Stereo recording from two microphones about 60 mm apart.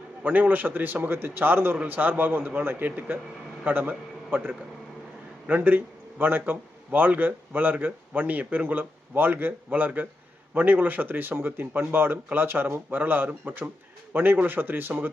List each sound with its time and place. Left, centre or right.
0.2 s a man's voice: right